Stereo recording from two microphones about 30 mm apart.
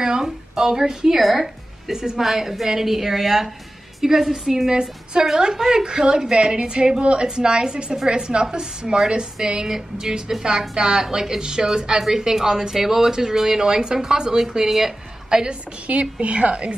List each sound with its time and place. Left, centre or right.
0.2 s a woman's voice: centre
12.0 s a woman's voice: centre
15.2 s a woman's voice: right
15.9 s a woman's voice: right